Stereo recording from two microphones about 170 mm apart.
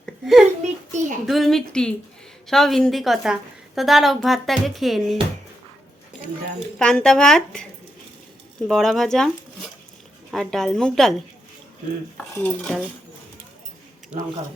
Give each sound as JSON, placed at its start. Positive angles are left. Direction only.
{"t": 0.0, "sound": "a sound", "side_deg": 0}
{"t": 0.6, "sound": "a sound", "side_deg": -45}
{"t": 1.3, "sound": "a woman's voice", "side_deg": 0}
{"t": 6.7, "sound": "a woman's voice", "side_deg": 5}
{"t": 10.3, "sound": "a woman's voice", "side_deg": 0}
{"t": 12.3, "sound": "cutlery", "side_deg": 10}